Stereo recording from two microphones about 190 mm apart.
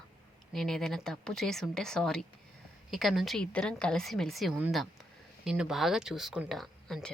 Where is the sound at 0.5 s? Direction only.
Centre (ahead or behind).